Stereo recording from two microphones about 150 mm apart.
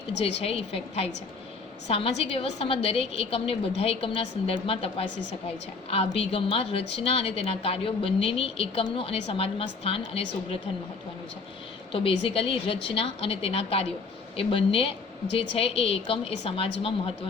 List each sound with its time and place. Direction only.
0.2 s a woman's voice: 40° left (ahead or behind)
11.9 s a woman's voice: 35° left (ahead or behind)